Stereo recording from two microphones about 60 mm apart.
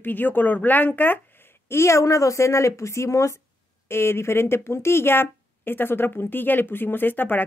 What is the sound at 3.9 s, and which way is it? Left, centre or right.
Speech, left.